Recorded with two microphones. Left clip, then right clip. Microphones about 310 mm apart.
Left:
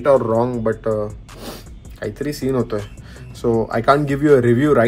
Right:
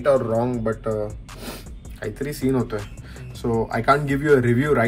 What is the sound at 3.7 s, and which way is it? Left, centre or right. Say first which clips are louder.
Speech: left 2 dB; centre.